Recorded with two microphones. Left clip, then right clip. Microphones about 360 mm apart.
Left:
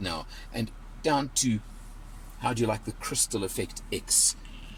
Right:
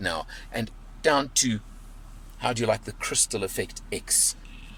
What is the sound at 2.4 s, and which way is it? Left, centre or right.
Speech, right.